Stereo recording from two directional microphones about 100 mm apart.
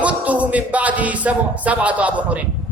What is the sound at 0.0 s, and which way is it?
A man's voice, 15° right (ahead or behind).